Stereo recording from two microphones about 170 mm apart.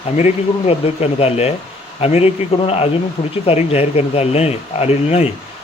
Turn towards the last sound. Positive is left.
turn(degrees=40)  # may be behind; listen again after turning